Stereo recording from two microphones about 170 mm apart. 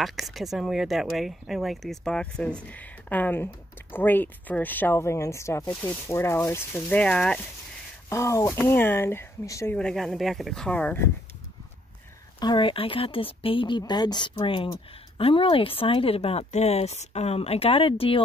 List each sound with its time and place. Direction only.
0.0 s speech: centre (ahead or behind)
8.1 s speech: 20° left (ahead or behind)
9.8 s speech: 5° left (ahead or behind)
12.4 s speech: 25° left (ahead or behind)